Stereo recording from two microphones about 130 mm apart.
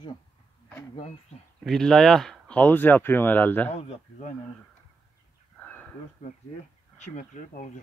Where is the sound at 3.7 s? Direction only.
55° left (ahead or behind).